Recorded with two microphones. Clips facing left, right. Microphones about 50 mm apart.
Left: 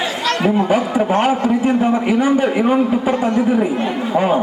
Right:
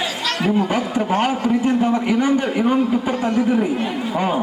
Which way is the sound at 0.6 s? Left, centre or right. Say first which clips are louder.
Left 4 dB; centre.